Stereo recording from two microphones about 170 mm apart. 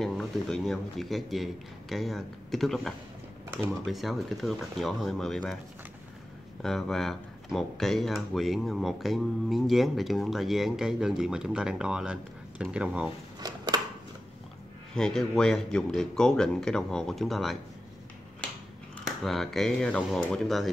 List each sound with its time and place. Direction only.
0.0 s speech: centre (ahead or behind)
6.6 s speech: centre (ahead or behind)
13.4 s a sound: 20° right (ahead or behind)
15.0 s speech: 5° left (ahead or behind)
19.0 s speech: centre (ahead or behind)